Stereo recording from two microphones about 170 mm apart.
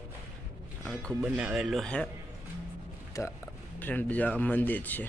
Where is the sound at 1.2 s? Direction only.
5° right (ahead or behind).